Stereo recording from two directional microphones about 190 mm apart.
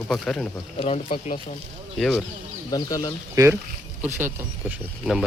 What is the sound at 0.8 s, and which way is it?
Speech, 30° left (ahead or behind).